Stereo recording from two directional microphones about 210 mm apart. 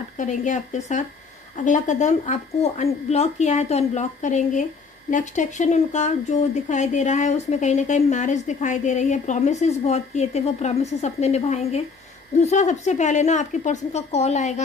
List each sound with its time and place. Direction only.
0.2 s speech: 35° left (ahead or behind)